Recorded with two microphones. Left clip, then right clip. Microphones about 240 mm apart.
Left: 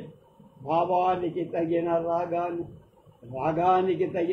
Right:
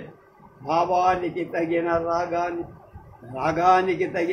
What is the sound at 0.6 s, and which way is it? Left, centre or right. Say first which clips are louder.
A man's voice: right 3 dB; right.